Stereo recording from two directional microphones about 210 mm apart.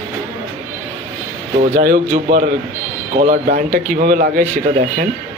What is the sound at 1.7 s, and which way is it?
A man's voice, 40° right (ahead or behind).